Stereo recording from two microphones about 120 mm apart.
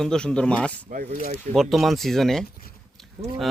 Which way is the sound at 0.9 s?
90° right.